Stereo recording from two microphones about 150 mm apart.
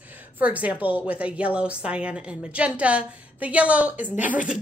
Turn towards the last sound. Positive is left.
turn(degrees=-5)  # may be behind; listen again after turning